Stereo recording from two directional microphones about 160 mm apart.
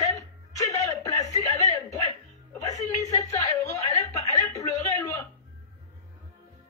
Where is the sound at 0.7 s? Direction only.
20° left (ahead or behind).